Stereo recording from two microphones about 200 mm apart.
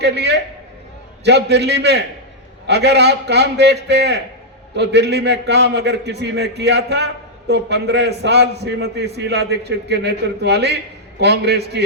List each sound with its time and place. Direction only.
0.0 s a man's voice: 55° right (ahead or behind)